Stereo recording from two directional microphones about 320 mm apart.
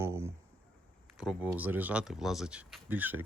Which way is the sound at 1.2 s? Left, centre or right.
Centre.